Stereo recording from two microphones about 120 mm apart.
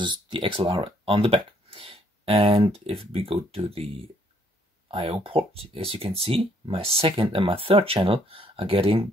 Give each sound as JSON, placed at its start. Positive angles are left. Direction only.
{"t": 0.0, "sound": "speech", "side_deg": -40}